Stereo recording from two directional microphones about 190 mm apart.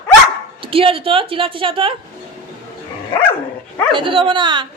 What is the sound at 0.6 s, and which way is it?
A woman's voice, 30° right (ahead or behind).